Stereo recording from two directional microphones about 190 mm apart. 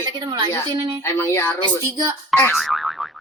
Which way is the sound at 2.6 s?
Centre (ahead or behind).